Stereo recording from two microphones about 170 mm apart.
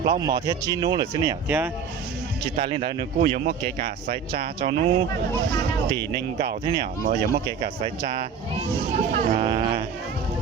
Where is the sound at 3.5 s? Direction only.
60° right (ahead or behind).